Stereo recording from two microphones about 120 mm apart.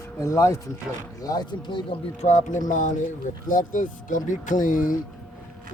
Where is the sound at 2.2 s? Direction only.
90° left.